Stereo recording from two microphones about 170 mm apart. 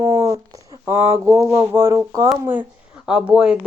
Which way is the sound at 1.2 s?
15° right (ahead or behind).